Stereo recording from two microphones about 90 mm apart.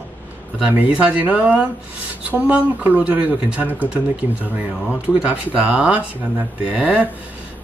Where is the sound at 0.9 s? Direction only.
15° right (ahead or behind).